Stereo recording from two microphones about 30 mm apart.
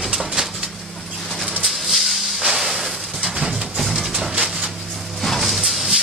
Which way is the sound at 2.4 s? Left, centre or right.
Centre.